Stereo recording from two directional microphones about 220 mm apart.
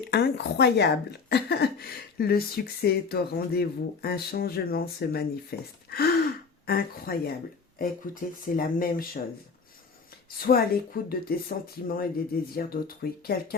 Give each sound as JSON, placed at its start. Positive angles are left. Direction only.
{"t": 0.1, "sound": "speech", "side_deg": 50}
{"t": 10.4, "sound": "speech", "side_deg": 40}